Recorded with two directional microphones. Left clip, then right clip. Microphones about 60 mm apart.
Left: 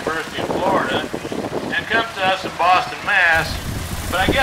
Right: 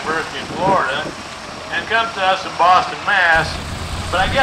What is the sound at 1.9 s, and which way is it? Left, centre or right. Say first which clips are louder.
Speech: right 3 dB; left.